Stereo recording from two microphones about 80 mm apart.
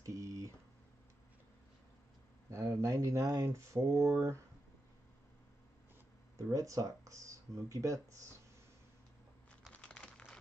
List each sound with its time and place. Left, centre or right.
0.0 s a sound: right
2.5 s speech: right
6.3 s speech: right
9.7 s computer keyboard: centre